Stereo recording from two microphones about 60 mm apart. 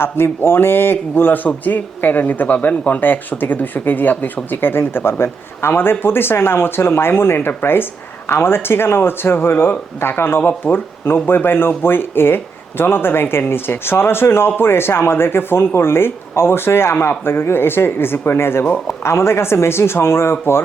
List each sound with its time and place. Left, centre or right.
0.0 s speech: left